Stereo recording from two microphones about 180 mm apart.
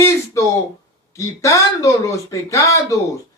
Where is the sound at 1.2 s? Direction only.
15° left (ahead or behind).